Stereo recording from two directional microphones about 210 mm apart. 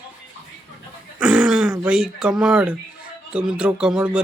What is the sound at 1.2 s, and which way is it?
Throat clearing, 5° right (ahead or behind).